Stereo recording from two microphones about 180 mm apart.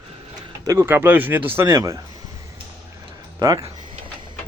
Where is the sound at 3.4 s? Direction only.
20° right (ahead or behind).